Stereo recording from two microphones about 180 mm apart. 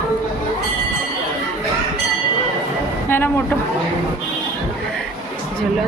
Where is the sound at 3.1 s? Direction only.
10° left (ahead or behind).